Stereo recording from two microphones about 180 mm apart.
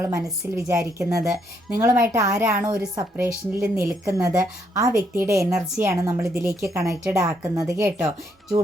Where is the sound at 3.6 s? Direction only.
5° right (ahead or behind).